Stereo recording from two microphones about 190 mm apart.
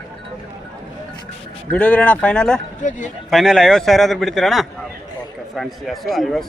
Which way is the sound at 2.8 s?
40° left (ahead or behind).